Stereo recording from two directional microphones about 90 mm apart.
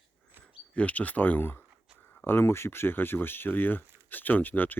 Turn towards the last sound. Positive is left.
turn(degrees=20)  # may be behind; listen again after turning